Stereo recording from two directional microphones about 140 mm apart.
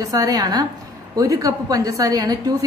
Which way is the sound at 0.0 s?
25° right (ahead or behind).